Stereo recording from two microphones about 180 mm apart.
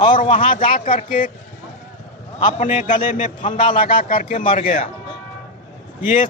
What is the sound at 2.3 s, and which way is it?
A man's voice, 45° left (ahead or behind).